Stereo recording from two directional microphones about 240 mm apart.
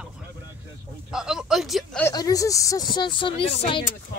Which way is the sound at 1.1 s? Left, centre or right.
Centre.